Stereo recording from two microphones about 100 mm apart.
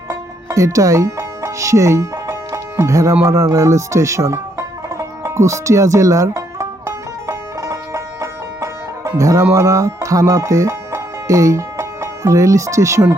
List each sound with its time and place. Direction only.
0.1 s music: 30° right (ahead or behind)
3.5 s banjo: 30° right (ahead or behind)